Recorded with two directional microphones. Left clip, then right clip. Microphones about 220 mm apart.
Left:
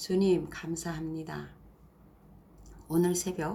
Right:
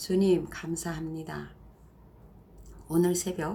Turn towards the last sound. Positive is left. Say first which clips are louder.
# right 2 dB
turn(degrees=0)  # may be behind; listen again after turning